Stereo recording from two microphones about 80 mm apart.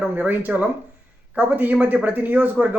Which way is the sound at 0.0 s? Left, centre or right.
Right.